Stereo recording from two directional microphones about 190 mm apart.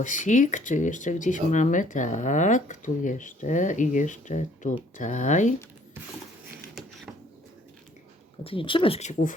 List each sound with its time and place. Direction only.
0.0 s speech: 40° left (ahead or behind)
6.8 s patter: centre (ahead or behind)
8.4 s speech: 25° left (ahead or behind)